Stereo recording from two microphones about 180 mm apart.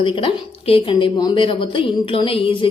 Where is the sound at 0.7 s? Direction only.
25° left (ahead or behind).